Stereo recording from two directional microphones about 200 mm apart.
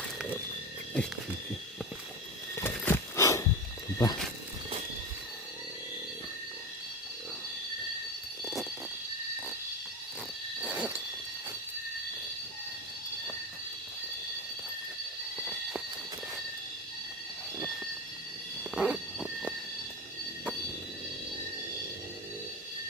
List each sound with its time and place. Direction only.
2.6 s a sound: 10° left (ahead or behind)
3.9 s wild animals: 20° left (ahead or behind)
10.6 s owl: 5° right (ahead or behind)
18.7 s owl: 5° right (ahead or behind)